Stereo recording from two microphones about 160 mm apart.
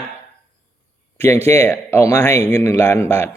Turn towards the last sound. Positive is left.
turn(degrees=15)  # may be behind; listen again after turning